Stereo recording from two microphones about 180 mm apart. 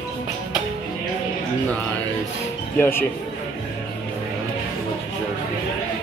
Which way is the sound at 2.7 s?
10° left (ahead or behind).